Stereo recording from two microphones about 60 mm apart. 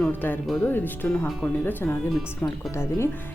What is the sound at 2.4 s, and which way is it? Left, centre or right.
Speech, left.